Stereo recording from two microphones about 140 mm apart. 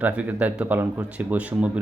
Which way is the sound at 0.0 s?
10° right (ahead or behind).